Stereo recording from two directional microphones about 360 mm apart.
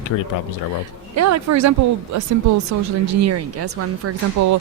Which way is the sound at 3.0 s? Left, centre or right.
Right.